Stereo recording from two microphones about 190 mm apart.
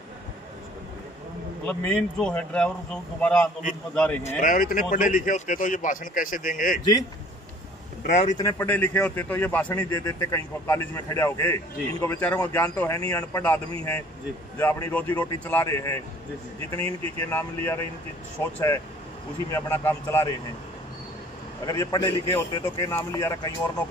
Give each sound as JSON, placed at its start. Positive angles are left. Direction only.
{"t": 1.7, "sound": "a man's voice", "side_deg": 5}
{"t": 4.4, "sound": "speech", "side_deg": 45}
{"t": 8.1, "sound": "speech", "side_deg": 40}
{"t": 8.4, "sound": "a man's voice", "side_deg": 15}
{"t": 9.8, "sound": "a man's voice", "side_deg": 20}
{"t": 14.6, "sound": "a man's voice", "side_deg": 10}
{"t": 17.2, "sound": "a man's voice", "side_deg": 10}
{"t": 21.6, "sound": "a man's voice", "side_deg": 20}